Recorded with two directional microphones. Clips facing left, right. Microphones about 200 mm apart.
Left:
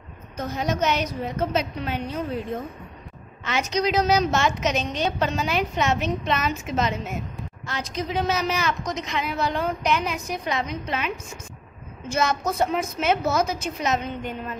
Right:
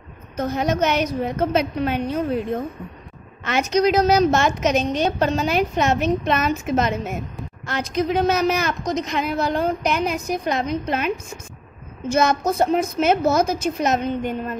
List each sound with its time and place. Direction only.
0.4 s a woman's voice: 55° right (ahead or behind)
3.4 s a woman's voice: 55° right (ahead or behind)
8.8 s a woman's voice: 40° right (ahead or behind)